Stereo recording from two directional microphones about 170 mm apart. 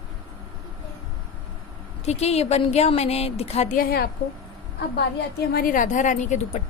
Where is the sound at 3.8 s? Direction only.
65° left (ahead or behind).